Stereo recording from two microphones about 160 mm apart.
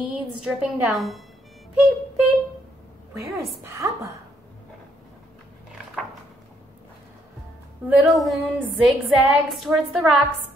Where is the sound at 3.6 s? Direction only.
15° right (ahead or behind).